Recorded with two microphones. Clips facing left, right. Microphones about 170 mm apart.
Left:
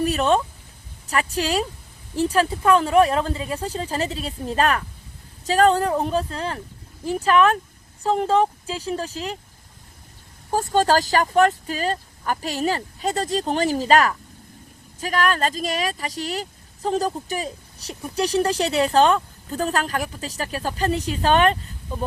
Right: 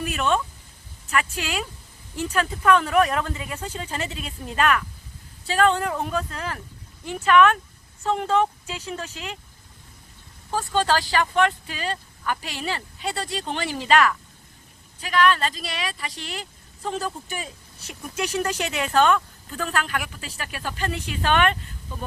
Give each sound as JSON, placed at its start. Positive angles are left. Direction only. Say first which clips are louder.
{"t": 0.0, "sound": "a sound", "louder": "left 5 dB", "side_deg": 35}
{"t": 1.0, "sound": "speech", "louder": "left 3 dB", "side_deg": 35}
{"t": 10.5, "sound": "speech", "louder": "left 4 dB", "side_deg": 45}